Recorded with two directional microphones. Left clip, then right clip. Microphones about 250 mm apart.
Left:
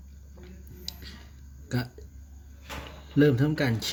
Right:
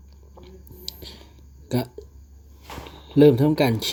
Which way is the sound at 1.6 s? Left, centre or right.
Centre.